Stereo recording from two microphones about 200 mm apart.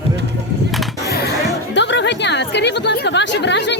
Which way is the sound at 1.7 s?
60° left (ahead or behind).